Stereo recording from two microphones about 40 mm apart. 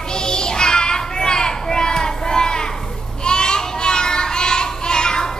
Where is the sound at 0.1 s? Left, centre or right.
Centre.